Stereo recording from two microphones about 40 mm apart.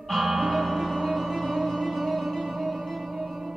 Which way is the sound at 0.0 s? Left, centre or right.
Centre.